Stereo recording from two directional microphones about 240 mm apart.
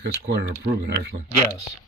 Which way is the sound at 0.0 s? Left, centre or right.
Right.